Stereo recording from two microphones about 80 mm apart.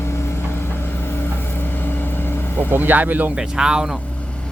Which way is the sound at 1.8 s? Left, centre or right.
Left.